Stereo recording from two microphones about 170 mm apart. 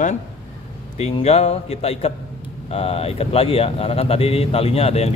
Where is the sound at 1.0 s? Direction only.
40° left (ahead or behind).